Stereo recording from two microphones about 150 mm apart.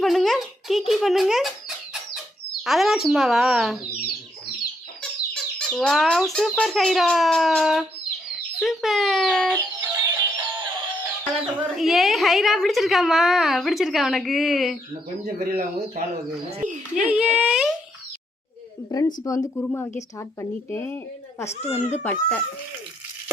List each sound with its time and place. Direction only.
0.0 s a child's voice: centre (ahead or behind)
5.3 s a woman's voice: 5° left (ahead or behind)
9.7 s music: 15° right (ahead or behind)
11.4 s a woman's voice: centre (ahead or behind)
15.4 s speech: 85° right
16.9 s speech: 5° right (ahead or behind)
18.9 s speech: 25° left (ahead or behind)
21.5 s speech: 45° left (ahead or behind)
21.9 s speech: 10° left (ahead or behind)